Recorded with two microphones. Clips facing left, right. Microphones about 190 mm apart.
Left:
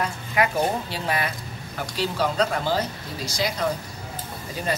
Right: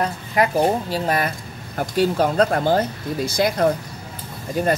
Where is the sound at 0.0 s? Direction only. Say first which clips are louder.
Right 4 dB; 40° right (ahead or behind).